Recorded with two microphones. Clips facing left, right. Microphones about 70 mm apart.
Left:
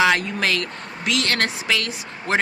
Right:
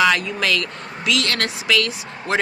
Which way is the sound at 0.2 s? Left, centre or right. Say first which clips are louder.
Right 1 dB; left.